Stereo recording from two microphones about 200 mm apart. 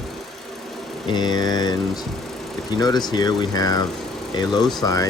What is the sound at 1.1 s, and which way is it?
Speech, 20° left (ahead or behind).